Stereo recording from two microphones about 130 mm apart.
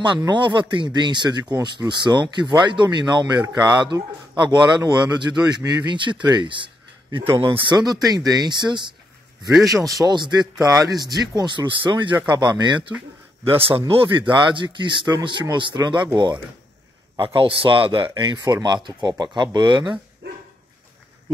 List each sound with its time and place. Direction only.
0.0 s speech: 35° right (ahead or behind)
7.9 s speech: 30° right (ahead or behind)
9.7 s speech: 25° right (ahead or behind)
13.4 s a man's voice: 45° right (ahead or behind)
17.2 s speech: 40° right (ahead or behind)